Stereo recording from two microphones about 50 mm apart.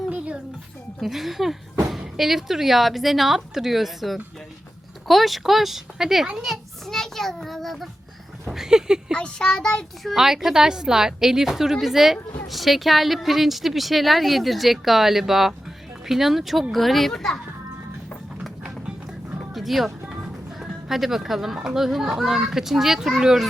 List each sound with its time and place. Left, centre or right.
1.0 s a woman's voice: centre
6.3 s a sound: centre
8.4 s speech: centre
9.1 s a child's voice: centre
10.0 s a woman's voice: centre
10.2 s a child's voice: centre
18.4 s music: centre
20.6 s a child's voice: centre